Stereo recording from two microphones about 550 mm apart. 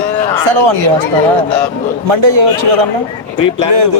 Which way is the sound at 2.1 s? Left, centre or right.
Right.